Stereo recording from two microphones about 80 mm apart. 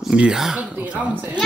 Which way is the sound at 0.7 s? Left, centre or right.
Centre.